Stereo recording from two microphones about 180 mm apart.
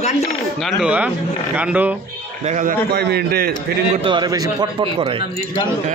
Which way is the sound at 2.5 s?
45° right (ahead or behind).